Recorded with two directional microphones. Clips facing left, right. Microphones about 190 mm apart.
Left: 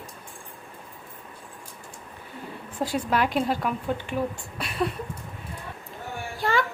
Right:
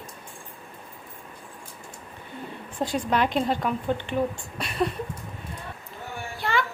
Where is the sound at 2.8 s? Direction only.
5° left (ahead or behind).